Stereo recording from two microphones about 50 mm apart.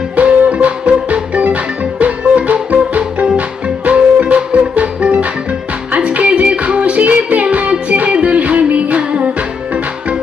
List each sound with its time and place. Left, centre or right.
0.2 s music: right